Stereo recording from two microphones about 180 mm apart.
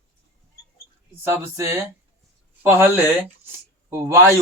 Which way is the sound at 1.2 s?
15° right (ahead or behind).